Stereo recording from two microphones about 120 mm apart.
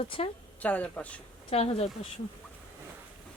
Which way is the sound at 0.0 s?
55° left (ahead or behind).